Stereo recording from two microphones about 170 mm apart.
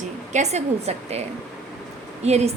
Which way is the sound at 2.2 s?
40° right (ahead or behind).